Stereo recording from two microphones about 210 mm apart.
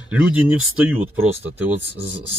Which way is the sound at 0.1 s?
5° right (ahead or behind).